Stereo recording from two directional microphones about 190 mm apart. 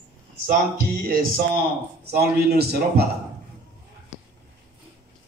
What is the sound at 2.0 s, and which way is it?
A man's voice, 55° right (ahead or behind).